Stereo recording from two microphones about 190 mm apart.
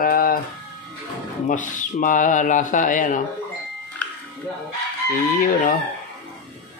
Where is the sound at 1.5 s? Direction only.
40° left (ahead or behind).